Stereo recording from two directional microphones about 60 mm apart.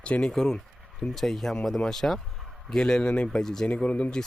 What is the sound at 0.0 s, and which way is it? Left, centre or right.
Speech, centre.